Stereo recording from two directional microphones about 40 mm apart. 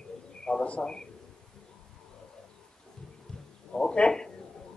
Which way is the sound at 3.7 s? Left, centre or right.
Left.